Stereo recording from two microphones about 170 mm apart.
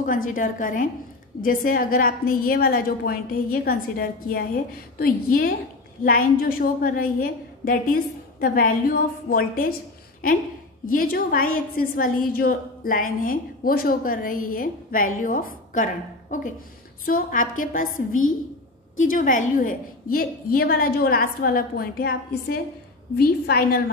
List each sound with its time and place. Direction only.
0.0 s a woman's voice: 50° left (ahead or behind)